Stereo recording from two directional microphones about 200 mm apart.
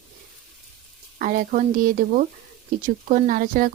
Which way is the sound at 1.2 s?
40° right (ahead or behind).